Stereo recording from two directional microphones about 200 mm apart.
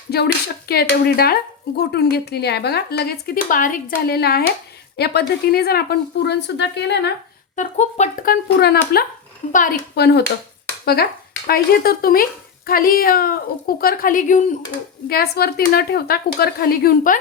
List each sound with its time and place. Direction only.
0.1 s a woman's voice: 55° left (ahead or behind)
7.5 s speech: 35° left (ahead or behind)
15.1 s speech: 50° left (ahead or behind)